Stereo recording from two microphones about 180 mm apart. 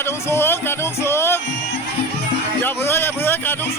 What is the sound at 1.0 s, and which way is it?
Music, 15° left (ahead or behind).